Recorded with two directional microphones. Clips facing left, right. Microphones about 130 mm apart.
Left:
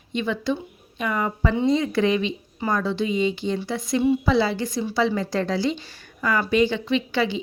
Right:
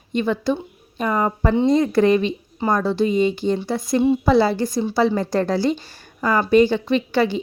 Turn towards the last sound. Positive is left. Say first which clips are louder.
# right 4 dB
turn(degrees=-45)  # may be behind; listen again after turning